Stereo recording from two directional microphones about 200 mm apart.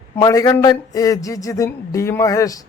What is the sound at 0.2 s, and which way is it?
A man's voice, 20° left (ahead or behind).